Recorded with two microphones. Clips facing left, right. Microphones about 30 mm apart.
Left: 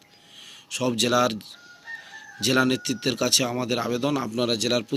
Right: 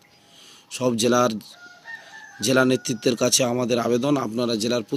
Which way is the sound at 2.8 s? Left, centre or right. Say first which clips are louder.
Right 4 dB; left.